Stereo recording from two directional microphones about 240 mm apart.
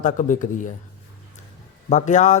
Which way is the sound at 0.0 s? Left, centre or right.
Left.